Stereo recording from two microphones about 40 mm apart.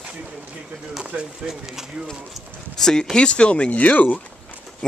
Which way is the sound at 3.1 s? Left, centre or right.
Left.